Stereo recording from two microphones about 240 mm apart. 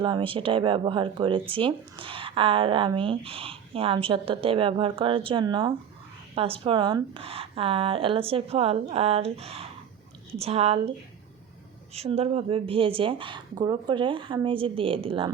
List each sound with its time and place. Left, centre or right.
0.0 s speech: right
11.9 s speech: right